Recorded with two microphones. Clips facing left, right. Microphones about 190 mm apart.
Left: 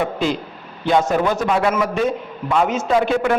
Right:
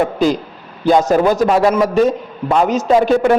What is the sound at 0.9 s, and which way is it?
A man's voice, 40° right (ahead or behind).